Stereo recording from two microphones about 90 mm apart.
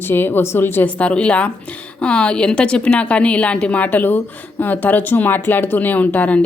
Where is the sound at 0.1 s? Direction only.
25° left (ahead or behind).